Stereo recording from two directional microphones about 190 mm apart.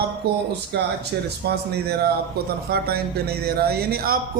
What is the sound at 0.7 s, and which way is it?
A man's voice, 60° right (ahead or behind).